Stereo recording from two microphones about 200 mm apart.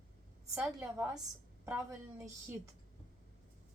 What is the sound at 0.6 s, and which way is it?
Speech, centre (ahead or behind).